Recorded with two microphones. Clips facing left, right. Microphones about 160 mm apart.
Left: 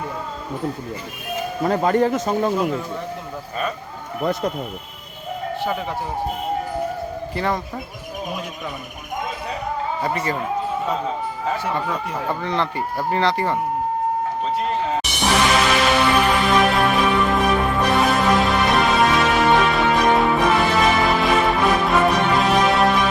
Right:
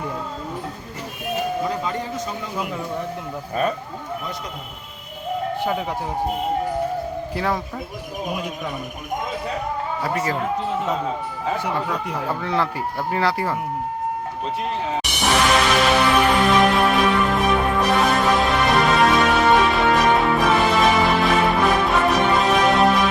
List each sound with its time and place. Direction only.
1.6 s a man's voice: 55° left (ahead or behind)
4.2 s a man's voice: 60° left (ahead or behind)
7.3 s speech: centre (ahead or behind)
10.0 s speech: centre (ahead or behind)
11.9 s speech: centre (ahead or behind)
15.2 s music: centre (ahead or behind)